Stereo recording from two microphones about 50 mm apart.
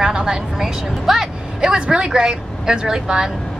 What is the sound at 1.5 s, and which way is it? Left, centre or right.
A woman's voice, centre.